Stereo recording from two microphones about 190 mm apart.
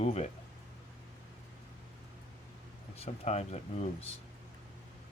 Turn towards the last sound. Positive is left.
turn(degrees=35)  # may be behind; listen again after turning